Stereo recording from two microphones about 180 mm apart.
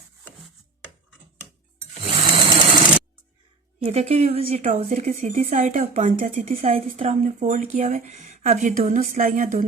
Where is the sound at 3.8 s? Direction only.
35° right (ahead or behind).